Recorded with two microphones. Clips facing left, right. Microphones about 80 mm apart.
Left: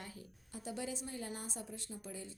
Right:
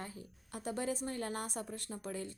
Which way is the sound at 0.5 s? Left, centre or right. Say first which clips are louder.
Right 5 dB; right.